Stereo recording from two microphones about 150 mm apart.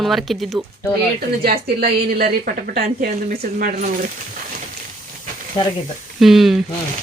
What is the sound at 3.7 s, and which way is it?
Speech, 60° right (ahead or behind).